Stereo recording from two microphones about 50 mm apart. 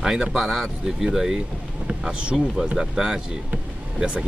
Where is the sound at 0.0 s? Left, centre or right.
Centre.